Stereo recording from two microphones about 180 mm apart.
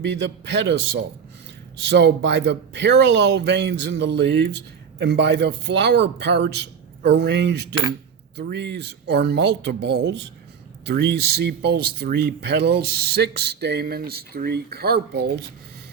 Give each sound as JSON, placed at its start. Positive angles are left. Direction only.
{"t": 0.0, "sound": "a man's voice", "side_deg": -75}